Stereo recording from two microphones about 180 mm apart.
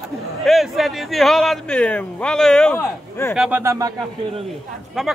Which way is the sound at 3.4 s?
10° right (ahead or behind).